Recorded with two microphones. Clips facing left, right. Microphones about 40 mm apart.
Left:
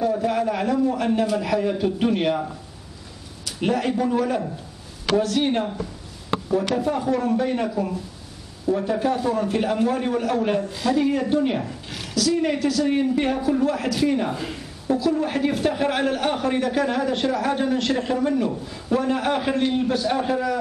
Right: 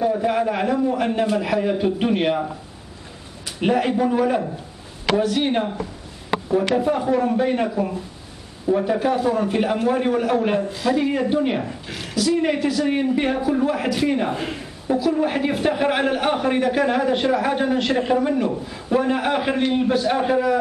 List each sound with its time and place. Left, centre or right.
0.0 s a man's voice: centre